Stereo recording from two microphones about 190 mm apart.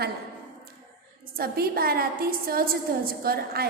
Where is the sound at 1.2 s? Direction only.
50° right (ahead or behind).